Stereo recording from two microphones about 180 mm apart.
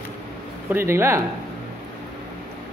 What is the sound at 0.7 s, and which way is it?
Speech, 15° right (ahead or behind).